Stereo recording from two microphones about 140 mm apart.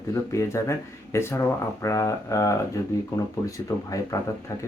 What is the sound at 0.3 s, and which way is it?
Speech, 20° left (ahead or behind).